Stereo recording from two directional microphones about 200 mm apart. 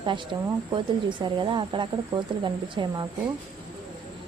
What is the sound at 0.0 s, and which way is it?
A woman's voice, 25° right (ahead or behind).